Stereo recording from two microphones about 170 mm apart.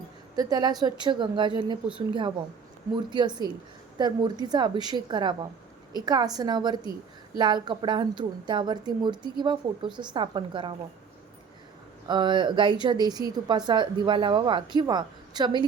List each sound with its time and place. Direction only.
0.3 s a woman's voice: 25° right (ahead or behind)
12.0 s a woman's voice: 25° right (ahead or behind)